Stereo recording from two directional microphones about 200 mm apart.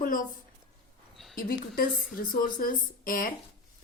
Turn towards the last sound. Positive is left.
turn(degrees=45)  # may be behind; listen again after turning